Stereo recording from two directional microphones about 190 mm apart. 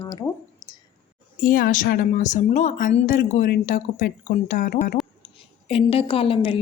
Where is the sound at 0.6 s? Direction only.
20° left (ahead or behind).